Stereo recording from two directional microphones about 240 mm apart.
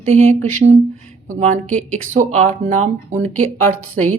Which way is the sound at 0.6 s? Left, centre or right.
Right.